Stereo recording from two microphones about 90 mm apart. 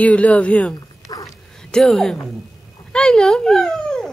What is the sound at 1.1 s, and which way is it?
Dog, 45° left (ahead or behind).